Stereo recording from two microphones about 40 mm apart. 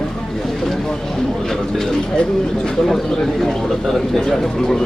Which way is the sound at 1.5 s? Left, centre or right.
Centre.